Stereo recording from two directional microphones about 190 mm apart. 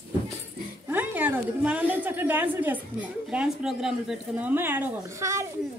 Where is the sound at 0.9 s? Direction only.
10° right (ahead or behind).